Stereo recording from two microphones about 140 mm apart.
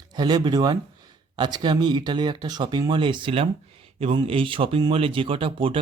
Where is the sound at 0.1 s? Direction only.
30° right (ahead or behind).